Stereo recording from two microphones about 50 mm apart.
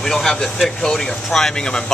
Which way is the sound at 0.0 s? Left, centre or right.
Centre.